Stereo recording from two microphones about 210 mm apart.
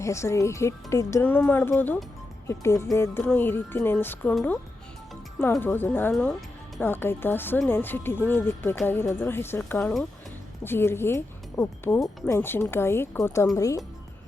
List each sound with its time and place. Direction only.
0.0 s speech: 15° left (ahead or behind)